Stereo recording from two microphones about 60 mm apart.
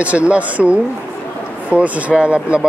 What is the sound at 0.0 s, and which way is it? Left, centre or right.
Speech, right.